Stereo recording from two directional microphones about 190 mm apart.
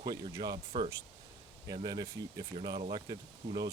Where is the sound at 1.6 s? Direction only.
20° right (ahead or behind).